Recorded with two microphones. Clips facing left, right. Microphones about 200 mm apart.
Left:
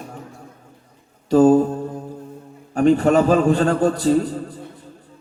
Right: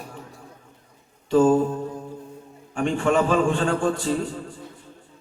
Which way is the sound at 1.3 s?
40° left (ahead or behind).